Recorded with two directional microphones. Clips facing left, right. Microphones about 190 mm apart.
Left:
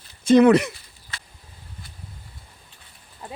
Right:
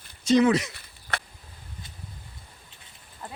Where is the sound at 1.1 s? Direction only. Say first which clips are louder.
Right 9 dB; 65° right (ahead or behind).